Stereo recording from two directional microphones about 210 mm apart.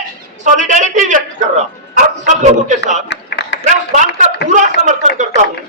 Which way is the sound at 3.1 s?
55° left (ahead or behind).